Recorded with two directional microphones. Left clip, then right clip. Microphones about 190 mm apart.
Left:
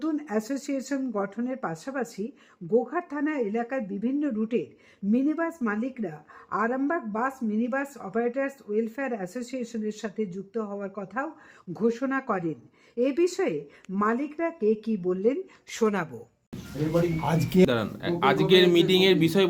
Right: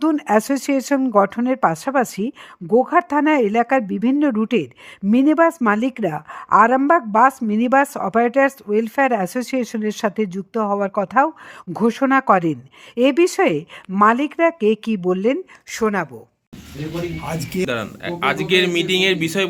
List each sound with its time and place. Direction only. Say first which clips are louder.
0.0 s a woman's voice: right 12 dB; 40° right (ahead or behind)
17.7 s speech: right 3 dB; 5° left (ahead or behind)